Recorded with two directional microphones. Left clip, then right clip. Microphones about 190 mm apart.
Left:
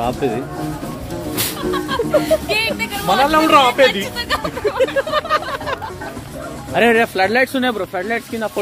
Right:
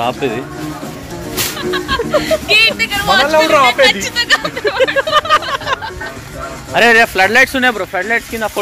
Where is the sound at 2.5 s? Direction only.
50° left (ahead or behind).